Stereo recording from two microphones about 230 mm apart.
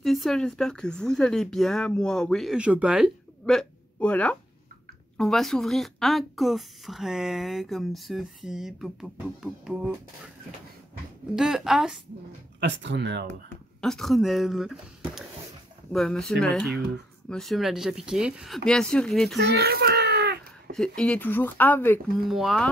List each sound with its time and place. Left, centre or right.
0.0 s speech: centre
11.3 s speech: centre
12.5 s speech: right
13.7 s speech: centre
15.9 s speech: centre
19.3 s a sound: right
20.7 s speech: centre